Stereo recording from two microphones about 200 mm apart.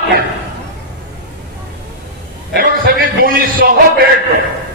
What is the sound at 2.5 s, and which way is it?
A man's voice, 50° right (ahead or behind).